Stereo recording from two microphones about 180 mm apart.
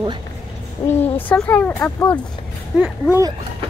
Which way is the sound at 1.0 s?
10° left (ahead or behind).